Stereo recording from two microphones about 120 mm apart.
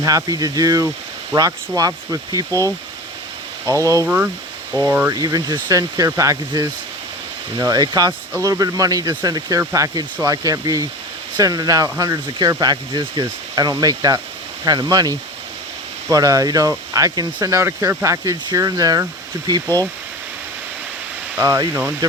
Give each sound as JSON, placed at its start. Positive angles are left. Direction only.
{"t": 0.0, "sound": "speech", "side_deg": -30}
{"t": 2.5, "sound": "speech", "side_deg": 20}
{"t": 3.7, "sound": "speech", "side_deg": -30}
{"t": 4.0, "sound": "speech", "side_deg": -15}
{"t": 5.1, "sound": "speech", "side_deg": -30}
{"t": 7.7, "sound": "speech", "side_deg": -30}
{"t": 19.6, "sound": "speech", "side_deg": 15}
{"t": 21.3, "sound": "speech", "side_deg": -20}